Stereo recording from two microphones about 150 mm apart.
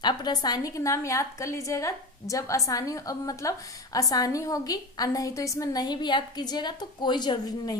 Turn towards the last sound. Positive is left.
turn(degrees=30)  # may be behind; listen again after turning